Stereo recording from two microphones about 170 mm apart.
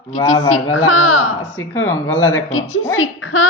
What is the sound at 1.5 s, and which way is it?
Speech, 15° left (ahead or behind).